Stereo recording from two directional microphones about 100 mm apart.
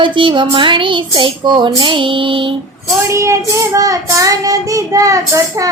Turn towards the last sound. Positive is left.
turn(degrees=-35)  # may be behind; listen again after turning